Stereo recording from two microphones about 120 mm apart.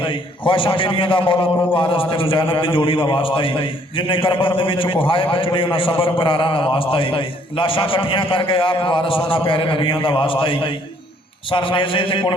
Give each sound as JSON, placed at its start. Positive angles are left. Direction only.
{"t": 0.0, "sound": "a man's voice", "side_deg": 45}